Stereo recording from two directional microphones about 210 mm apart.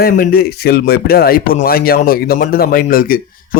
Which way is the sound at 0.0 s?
45° left (ahead or behind).